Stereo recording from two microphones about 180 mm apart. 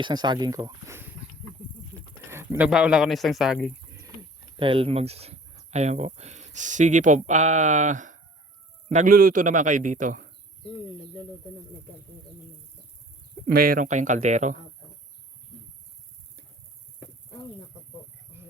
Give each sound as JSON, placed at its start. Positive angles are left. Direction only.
{"t": 0.0, "sound": "speech", "side_deg": -25}
{"t": 2.2, "sound": "a sound", "side_deg": -15}
{"t": 2.6, "sound": "speech", "side_deg": -5}
{"t": 4.6, "sound": "a man's voice", "side_deg": -30}
{"t": 13.5, "sound": "a man's voice", "side_deg": -55}